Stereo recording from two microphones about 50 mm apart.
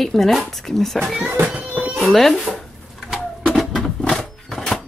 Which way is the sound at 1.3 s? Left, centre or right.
Right.